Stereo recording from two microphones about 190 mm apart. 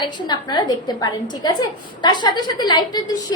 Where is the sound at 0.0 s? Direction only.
25° left (ahead or behind).